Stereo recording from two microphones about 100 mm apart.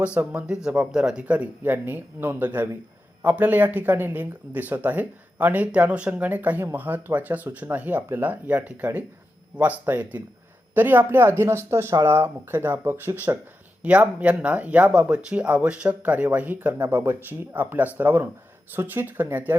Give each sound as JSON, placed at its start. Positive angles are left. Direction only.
{"t": 0.0, "sound": "speech", "side_deg": -15}